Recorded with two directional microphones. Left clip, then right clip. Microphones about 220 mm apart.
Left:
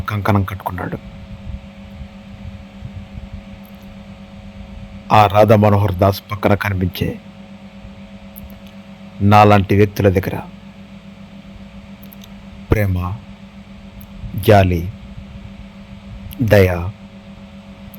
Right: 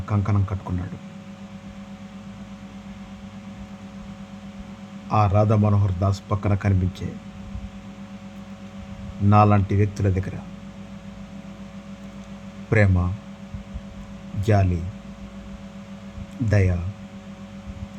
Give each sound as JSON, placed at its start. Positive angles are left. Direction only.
{"t": 0.0, "sound": "a man's voice", "side_deg": 30}
{"t": 5.0, "sound": "a man's voice", "side_deg": 30}
{"t": 9.3, "sound": "a man's voice", "side_deg": 35}
{"t": 14.4, "sound": "a man's voice", "side_deg": 35}
{"t": 16.5, "sound": "a man's voice", "side_deg": 35}